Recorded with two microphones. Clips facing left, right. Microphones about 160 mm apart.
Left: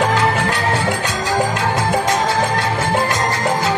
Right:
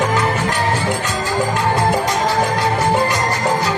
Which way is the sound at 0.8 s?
75° left (ahead or behind).